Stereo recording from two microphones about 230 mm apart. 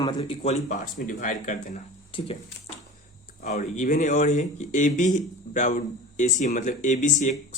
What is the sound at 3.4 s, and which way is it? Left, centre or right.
Speech, left.